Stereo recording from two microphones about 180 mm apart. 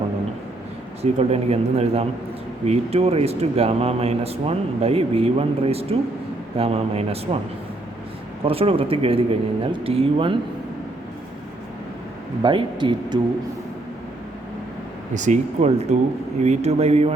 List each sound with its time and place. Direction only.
1.2 s speech: 35° right (ahead or behind)
8.4 s speech: 30° right (ahead or behind)
12.4 s a man's voice: 25° right (ahead or behind)
15.1 s speech: 40° right (ahead or behind)